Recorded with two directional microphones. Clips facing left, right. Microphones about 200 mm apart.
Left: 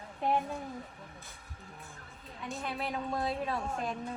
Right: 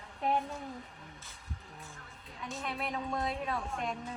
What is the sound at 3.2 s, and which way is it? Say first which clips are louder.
Speech: left 2 dB; 30° left (ahead or behind).